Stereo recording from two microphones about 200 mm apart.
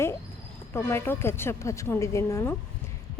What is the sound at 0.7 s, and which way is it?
A woman's voice, 10° left (ahead or behind).